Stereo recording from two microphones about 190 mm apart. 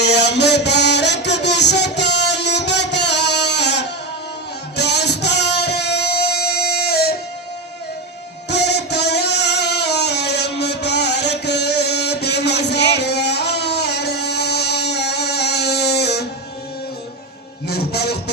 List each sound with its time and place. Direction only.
0.0 s music: 60° left (ahead or behind)
8.4 s music: 60° left (ahead or behind)
17.7 s music: 60° left (ahead or behind)